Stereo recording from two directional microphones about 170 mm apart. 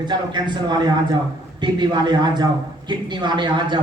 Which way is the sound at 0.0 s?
25° right (ahead or behind).